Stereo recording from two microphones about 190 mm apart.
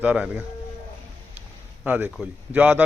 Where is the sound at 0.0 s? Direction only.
10° right (ahead or behind).